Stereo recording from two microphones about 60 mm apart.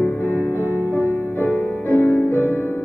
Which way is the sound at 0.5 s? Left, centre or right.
Right.